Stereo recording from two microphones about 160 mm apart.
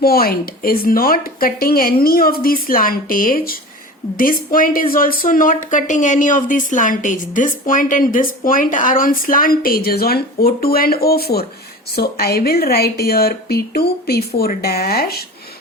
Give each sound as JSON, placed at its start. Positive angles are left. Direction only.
{"t": 0.0, "sound": "speech", "side_deg": 70}